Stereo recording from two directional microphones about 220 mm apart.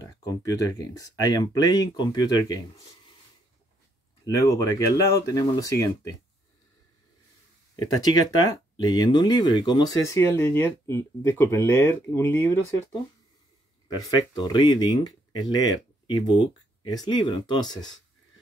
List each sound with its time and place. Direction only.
0.3 s speech: 15° left (ahead or behind)
4.2 s speech: 15° left (ahead or behind)
7.7 s speech: 15° left (ahead or behind)
13.8 s speech: 20° left (ahead or behind)